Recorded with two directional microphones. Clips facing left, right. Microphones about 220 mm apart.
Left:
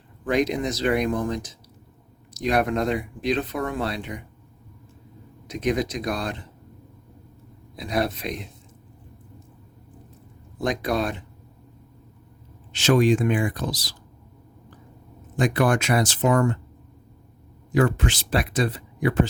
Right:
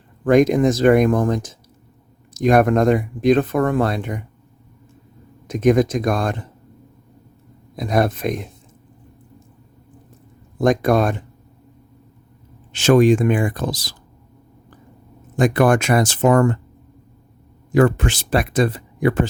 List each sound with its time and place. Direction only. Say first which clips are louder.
0.3 s speech: right 9 dB; 50° right (ahead or behind)
5.5 s speech: right 9 dB; 50° right (ahead or behind)
7.8 s speech: right 6 dB; 50° right (ahead or behind)
10.6 s speech: right 8 dB; 50° right (ahead or behind)
12.7 s speech: right 6 dB; 50° right (ahead or behind)
15.4 s speech: right 6 dB; 50° right (ahead or behind)
17.7 s speech: right 6 dB; 50° right (ahead or behind)